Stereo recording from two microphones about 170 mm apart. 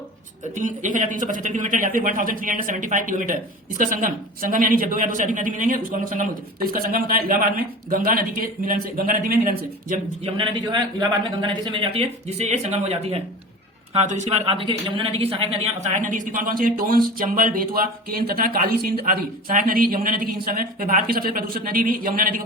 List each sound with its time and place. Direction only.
0.5 s speech: 50° right (ahead or behind)
10.2 s a man's voice: 30° right (ahead or behind); by 22.4 s 55° right (ahead or behind)